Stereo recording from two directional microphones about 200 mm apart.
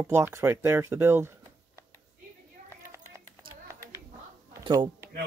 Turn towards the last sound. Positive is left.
turn(degrees=-20)  # may be behind; listen again after turning